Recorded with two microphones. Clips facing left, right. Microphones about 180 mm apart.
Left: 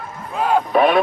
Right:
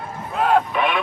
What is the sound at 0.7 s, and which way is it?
Speech, 40° left (ahead or behind).